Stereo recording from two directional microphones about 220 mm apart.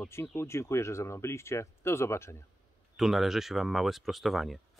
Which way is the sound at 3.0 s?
Centre (ahead or behind).